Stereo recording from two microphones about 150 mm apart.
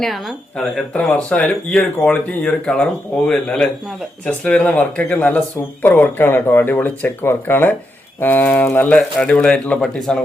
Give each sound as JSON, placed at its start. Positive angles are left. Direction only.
{"t": 0.0, "sound": "speech", "side_deg": 0}